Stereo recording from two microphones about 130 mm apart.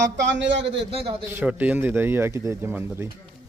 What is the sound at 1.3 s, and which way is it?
Speech, 15° right (ahead or behind).